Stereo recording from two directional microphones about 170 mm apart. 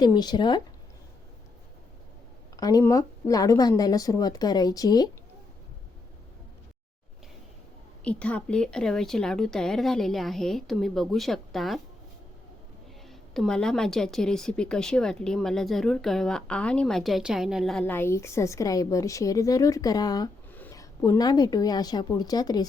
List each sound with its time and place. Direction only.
0.0 s speech: 25° left (ahead or behind)
2.6 s speech: 20° left (ahead or behind)
8.0 s speech: 10° left (ahead or behind)
13.1 s speech: centre (ahead or behind); by 22.6 s 25° left (ahead or behind)